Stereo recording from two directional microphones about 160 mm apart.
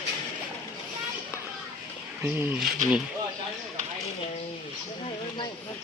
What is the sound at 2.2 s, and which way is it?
Speech, 10° right (ahead or behind).